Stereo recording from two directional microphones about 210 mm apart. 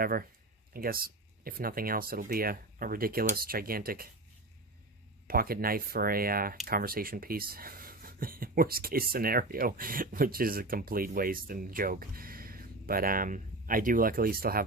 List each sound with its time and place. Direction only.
0.0 s speech: 45° right (ahead or behind)
5.3 s speech: 45° right (ahead or behind)